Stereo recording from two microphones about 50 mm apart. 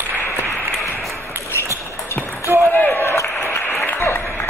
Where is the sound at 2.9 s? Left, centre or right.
Left.